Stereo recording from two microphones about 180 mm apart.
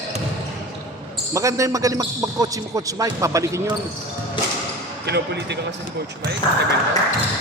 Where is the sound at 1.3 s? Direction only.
15° right (ahead or behind).